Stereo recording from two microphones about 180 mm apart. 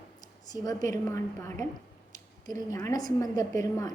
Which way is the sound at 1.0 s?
15° left (ahead or behind).